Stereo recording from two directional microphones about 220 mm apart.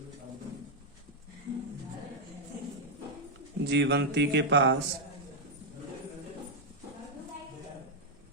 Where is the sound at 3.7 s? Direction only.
50° right (ahead or behind).